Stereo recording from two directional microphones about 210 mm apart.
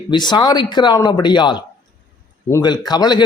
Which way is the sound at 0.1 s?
20° left (ahead or behind).